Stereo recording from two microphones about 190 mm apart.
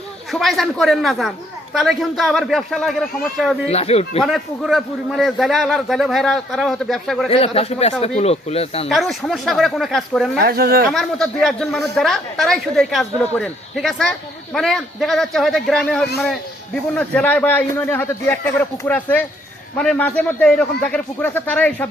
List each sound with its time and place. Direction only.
0.3 s speech: centre (ahead or behind)
3.7 s speech: 35° left (ahead or behind)
4.2 s speech: centre (ahead or behind)
7.3 s speech: 30° left (ahead or behind)
8.9 s speech: centre (ahead or behind)
10.3 s speech: 55° right (ahead or behind)
10.8 s speech: centre (ahead or behind)